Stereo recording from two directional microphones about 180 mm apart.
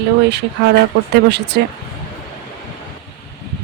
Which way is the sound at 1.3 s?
70° right (ahead or behind).